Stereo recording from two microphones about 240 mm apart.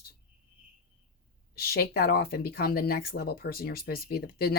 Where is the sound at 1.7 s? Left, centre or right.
Left.